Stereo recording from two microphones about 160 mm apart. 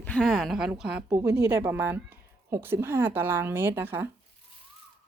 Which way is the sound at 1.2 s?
20° right (ahead or behind).